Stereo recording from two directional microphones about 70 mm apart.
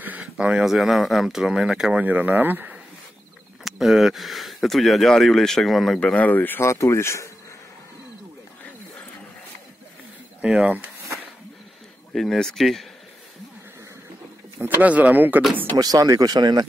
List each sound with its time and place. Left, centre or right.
0.2 s speech: centre
2.0 s speech: right
3.6 s speech: centre
5.9 s speech: centre
6.6 s speech: left
10.4 s speech: centre
12.1 s speech: centre
14.6 s speech: right
15.7 s speech: right